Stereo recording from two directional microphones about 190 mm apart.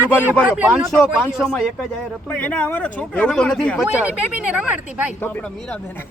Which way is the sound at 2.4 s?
10° left (ahead or behind).